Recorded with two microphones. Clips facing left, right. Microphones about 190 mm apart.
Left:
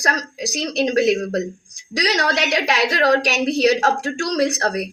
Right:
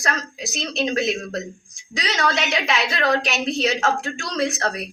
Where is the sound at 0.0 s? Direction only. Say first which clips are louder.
Left 3 dB; 35° left (ahead or behind).